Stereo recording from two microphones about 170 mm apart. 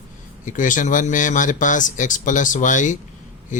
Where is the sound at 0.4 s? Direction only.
50° left (ahead or behind).